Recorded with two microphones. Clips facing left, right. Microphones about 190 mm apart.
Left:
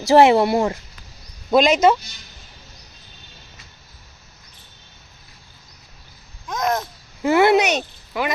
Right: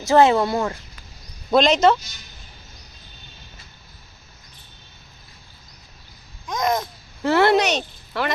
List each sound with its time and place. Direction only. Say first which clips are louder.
0.2 s speech: left 2 dB; 25° left (ahead or behind)
1.5 s speech: left 1 dB; 5° left (ahead or behind)
6.5 s speech: even; 5° left (ahead or behind)